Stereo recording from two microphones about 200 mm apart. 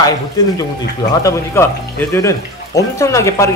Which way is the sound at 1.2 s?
15° left (ahead or behind).